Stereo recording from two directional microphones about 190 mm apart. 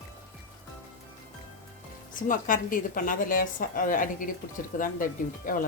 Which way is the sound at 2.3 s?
45° left (ahead or behind).